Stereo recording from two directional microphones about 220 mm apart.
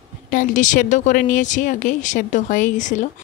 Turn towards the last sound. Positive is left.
turn(degrees=35)  # may be behind; listen again after turning